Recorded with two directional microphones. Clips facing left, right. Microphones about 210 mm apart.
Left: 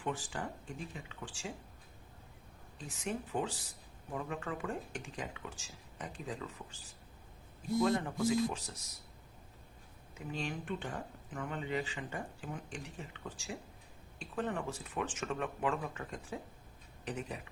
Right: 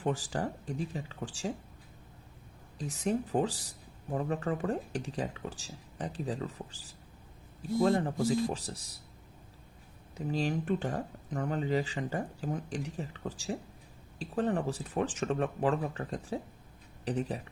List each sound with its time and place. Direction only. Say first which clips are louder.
0.0 s speech: right 7 dB; 40° right (ahead or behind)
2.7 s speech: right 8 dB; 40° right (ahead or behind)
10.2 s speech: right 8 dB; 35° right (ahead or behind)